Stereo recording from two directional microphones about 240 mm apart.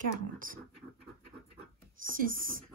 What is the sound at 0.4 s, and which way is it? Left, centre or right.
Speech, right.